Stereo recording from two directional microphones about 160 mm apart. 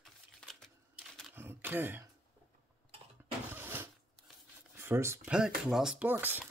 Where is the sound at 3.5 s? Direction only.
15° right (ahead or behind).